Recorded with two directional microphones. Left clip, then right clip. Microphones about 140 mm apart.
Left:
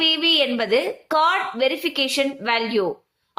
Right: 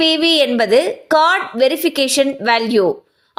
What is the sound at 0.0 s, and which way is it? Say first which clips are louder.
A woman's voice: right 5 dB; 45° right (ahead or behind).